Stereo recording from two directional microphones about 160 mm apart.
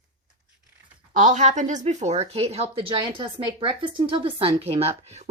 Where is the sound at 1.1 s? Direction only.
50° right (ahead or behind).